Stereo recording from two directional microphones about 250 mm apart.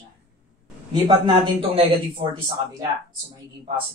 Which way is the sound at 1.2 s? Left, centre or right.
Right.